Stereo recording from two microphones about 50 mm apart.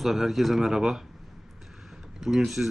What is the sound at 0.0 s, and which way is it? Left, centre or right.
Speech, centre.